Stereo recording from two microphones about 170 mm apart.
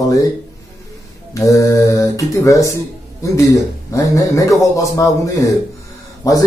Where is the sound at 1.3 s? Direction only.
20° left (ahead or behind).